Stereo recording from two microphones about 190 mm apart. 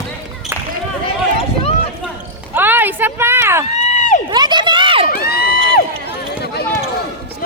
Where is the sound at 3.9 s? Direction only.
40° left (ahead or behind).